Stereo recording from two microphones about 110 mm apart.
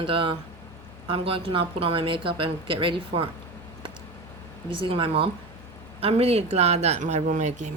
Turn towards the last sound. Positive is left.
turn(degrees=-90)